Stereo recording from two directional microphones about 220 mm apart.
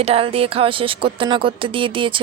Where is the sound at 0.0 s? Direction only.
25° right (ahead or behind).